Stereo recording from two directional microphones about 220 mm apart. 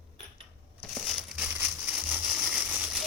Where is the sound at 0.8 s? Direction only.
Centre (ahead or behind).